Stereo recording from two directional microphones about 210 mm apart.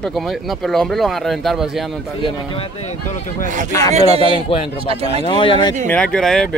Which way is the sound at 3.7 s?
15° left (ahead or behind).